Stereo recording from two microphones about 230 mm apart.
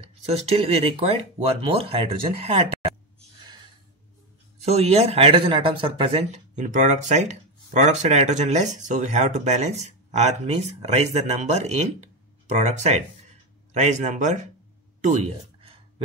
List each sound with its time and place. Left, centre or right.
0.3 s speech: right
4.6 s speech: right
15.0 s a sound: right